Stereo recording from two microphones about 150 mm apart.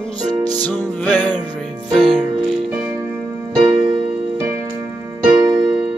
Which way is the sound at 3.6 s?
40° right (ahead or behind).